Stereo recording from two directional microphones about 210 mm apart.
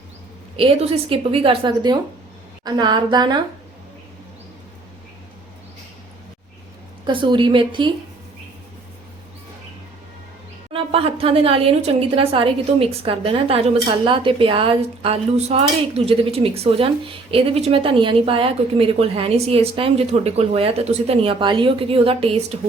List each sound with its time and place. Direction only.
0.5 s a woman's voice: 25° right (ahead or behind)
7.0 s a woman's voice: 25° right (ahead or behind)
10.7 s a woman's voice: 25° right (ahead or behind)